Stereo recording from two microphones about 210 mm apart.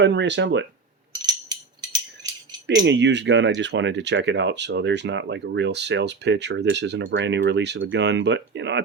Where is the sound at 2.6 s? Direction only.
55° right (ahead or behind).